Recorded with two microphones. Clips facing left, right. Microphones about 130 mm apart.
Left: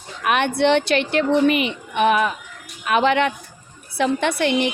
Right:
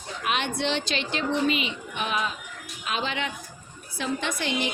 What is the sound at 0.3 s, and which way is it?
A woman's voice, 55° left (ahead or behind).